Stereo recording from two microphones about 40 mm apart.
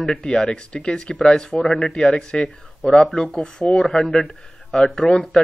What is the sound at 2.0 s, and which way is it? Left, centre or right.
Speech, left.